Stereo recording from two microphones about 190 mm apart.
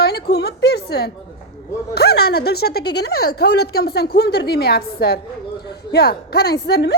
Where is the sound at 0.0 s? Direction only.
55° left (ahead or behind).